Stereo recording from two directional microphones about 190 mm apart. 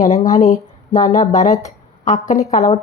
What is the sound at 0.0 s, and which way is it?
Speech, 40° left (ahead or behind).